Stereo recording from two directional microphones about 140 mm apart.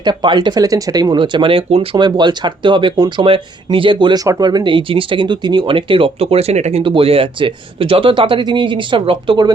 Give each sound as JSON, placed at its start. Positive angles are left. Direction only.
{"t": 0.0, "sound": "speech", "side_deg": -30}